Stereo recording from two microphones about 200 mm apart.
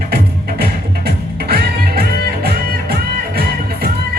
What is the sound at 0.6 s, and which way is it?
Music, 50° right (ahead or behind).